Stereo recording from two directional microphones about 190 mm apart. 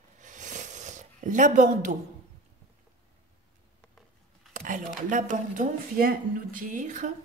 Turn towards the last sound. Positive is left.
turn(degrees=-40)  # may be behind; listen again after turning